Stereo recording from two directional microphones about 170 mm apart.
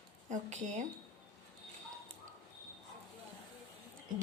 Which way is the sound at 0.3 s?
45° right (ahead or behind).